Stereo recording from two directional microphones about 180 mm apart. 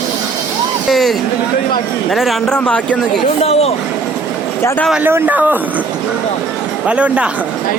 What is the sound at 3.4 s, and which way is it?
Speech, 35° left (ahead or behind).